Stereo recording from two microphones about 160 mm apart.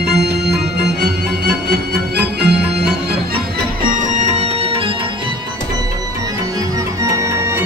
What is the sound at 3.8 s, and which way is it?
Music, 50° right (ahead or behind).